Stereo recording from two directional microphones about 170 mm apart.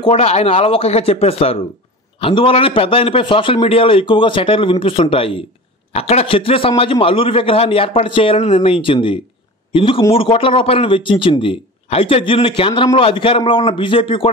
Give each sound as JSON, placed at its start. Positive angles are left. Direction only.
{"t": 0.0, "sound": "a man's voice", "side_deg": 35}